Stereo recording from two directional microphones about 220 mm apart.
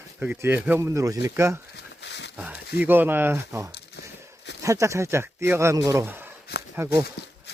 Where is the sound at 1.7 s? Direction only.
50° left (ahead or behind).